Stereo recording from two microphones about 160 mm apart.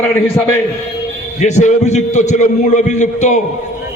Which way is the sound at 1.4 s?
45° left (ahead or behind).